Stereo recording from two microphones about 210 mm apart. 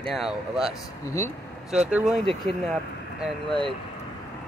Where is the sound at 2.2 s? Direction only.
25° right (ahead or behind).